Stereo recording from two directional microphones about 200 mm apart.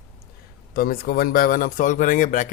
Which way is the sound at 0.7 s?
50° left (ahead or behind).